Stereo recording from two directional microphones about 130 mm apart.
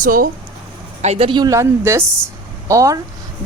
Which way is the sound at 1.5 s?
20° right (ahead or behind).